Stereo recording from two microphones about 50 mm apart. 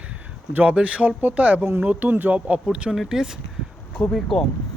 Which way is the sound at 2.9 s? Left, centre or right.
Centre.